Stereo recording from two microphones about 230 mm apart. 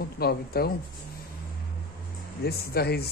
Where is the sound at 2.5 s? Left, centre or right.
Left.